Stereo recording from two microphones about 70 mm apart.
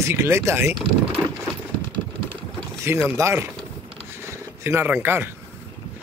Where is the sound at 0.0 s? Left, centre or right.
Right.